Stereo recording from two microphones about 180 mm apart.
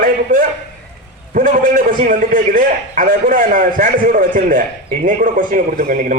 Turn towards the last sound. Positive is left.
turn(degrees=-45)  # may be behind; listen again after turning